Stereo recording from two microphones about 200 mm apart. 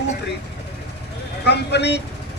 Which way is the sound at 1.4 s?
55° left (ahead or behind).